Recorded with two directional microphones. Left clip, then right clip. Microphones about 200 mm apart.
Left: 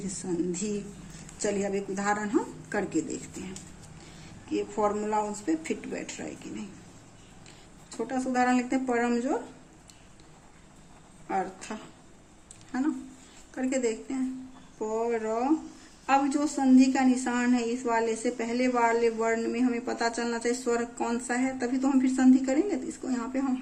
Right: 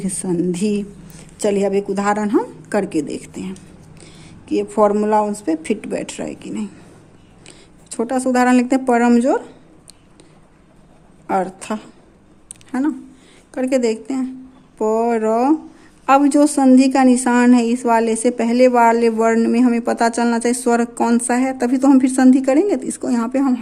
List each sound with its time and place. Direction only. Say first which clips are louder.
0.2 s a woman's voice: right 11 dB; 45° right (ahead or behind)
11.3 s a woman's voice: right 11 dB; 50° right (ahead or behind)
12.7 s a woman's voice: right 9 dB; 40° right (ahead or behind)